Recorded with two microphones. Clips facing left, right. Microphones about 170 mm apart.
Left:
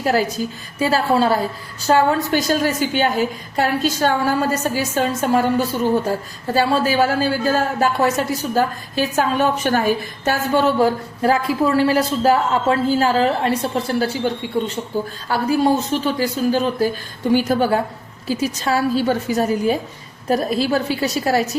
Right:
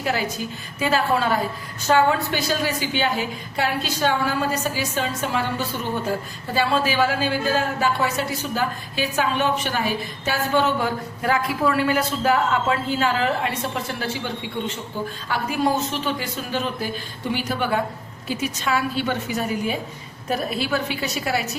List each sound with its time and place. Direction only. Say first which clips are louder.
0.0 s a woman's voice: left 6 dB; 40° left (ahead or behind)
10.7 s a woman's voice: left 7 dB; 35° left (ahead or behind)